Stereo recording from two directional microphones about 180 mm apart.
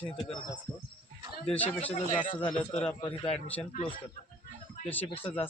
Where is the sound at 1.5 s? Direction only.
10° left (ahead or behind).